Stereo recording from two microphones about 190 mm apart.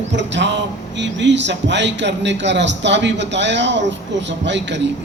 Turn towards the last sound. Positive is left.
turn(degrees=-70)  # may be behind; listen again after turning